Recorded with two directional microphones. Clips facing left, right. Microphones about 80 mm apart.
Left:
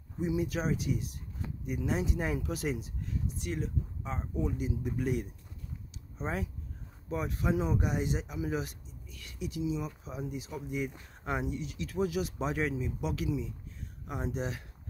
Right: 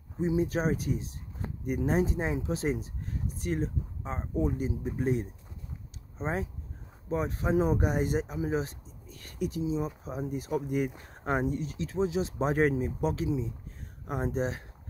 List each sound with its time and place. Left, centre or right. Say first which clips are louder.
0.2 s speech: right 4 dB; right
13.1 s speech: right 3 dB; right
14.0 s speech: right 5 dB; right